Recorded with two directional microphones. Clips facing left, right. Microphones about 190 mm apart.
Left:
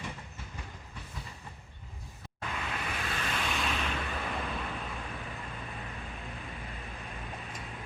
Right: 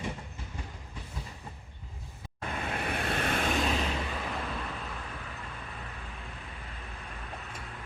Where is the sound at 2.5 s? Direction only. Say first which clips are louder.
Right 4 dB; 45° right (ahead or behind).